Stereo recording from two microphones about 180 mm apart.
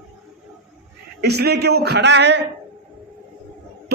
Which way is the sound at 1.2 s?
65° right (ahead or behind).